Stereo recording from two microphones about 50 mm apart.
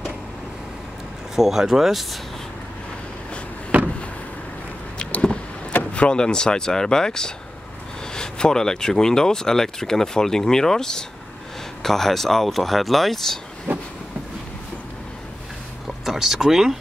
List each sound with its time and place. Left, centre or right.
1.3 s speech: centre
3.7 s vehicle: right
5.7 s speech: left; by 13.4 s centre
16.1 s speech: centre